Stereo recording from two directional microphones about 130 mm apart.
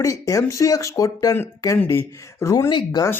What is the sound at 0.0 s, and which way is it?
Speech, 25° left (ahead or behind).